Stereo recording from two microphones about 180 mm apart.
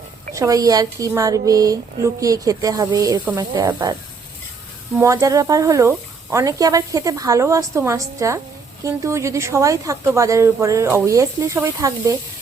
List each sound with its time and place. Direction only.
0.3 s speech: 20° right (ahead or behind)
4.9 s speech: 15° right (ahead or behind)